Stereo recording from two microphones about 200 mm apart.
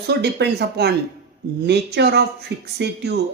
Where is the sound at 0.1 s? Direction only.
60° right (ahead or behind).